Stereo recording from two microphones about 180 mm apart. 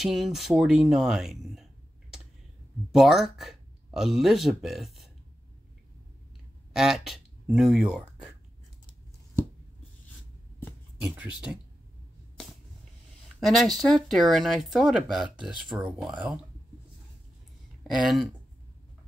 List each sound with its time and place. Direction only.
0.0 s speech: centre (ahead or behind)
6.7 s speech: 5° right (ahead or behind)
11.1 s speech: 5° right (ahead or behind)
13.6 s speech: centre (ahead or behind)
17.8 s speech: centre (ahead or behind)